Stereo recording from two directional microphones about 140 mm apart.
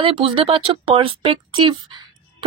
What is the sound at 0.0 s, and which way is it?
Speech, 35° right (ahead or behind).